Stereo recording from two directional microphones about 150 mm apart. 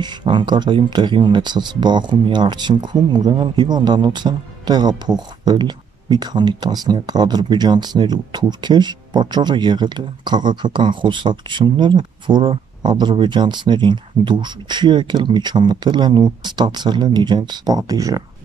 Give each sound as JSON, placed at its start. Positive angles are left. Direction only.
{"t": 0.0, "sound": "speech", "side_deg": -30}